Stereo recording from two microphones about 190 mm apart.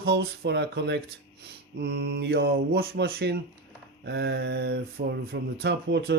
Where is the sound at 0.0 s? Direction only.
60° right (ahead or behind).